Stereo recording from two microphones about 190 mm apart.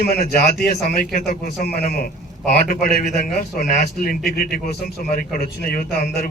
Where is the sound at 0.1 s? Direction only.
55° left (ahead or behind).